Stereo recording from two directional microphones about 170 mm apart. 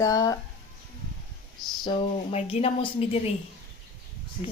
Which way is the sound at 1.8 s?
35° left (ahead or behind).